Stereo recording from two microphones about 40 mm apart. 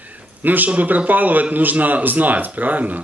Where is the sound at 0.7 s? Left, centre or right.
Right.